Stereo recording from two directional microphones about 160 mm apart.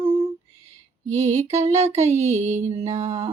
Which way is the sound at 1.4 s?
20° right (ahead or behind).